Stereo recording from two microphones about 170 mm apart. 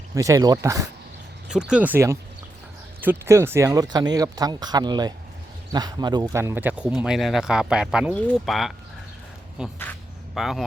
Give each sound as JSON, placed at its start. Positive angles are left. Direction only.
{"t": 0.1, "sound": "speech", "side_deg": -20}
{"t": 1.5, "sound": "speech", "side_deg": -5}